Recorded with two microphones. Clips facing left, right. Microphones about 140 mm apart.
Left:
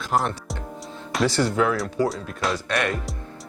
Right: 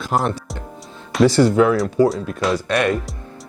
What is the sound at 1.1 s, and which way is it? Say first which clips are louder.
Speech: right 8 dB; 10° right (ahead or behind).